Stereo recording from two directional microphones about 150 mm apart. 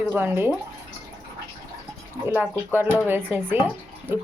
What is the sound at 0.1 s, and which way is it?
Speech, 15° right (ahead or behind).